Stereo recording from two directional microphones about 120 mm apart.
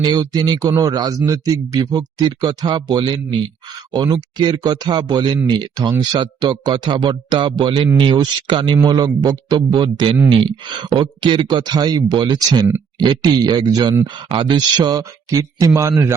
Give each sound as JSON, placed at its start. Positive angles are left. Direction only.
{"t": 0.0, "sound": "speech", "side_deg": -35}
{"t": 14.3, "sound": "speech", "side_deg": -45}